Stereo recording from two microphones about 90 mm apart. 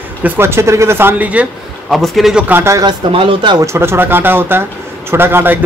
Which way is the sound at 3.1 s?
70° right (ahead or behind).